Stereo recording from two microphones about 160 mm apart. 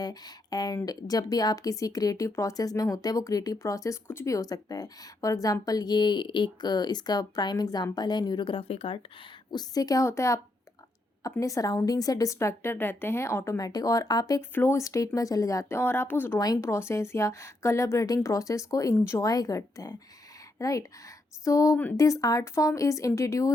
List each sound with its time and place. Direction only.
0.0 s speech: 25° left (ahead or behind)
9.5 s speech: 25° left (ahead or behind)